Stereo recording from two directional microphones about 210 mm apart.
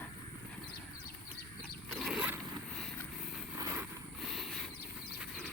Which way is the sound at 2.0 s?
5° right (ahead or behind).